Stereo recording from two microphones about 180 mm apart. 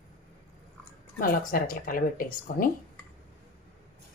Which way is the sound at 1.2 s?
50° left (ahead or behind).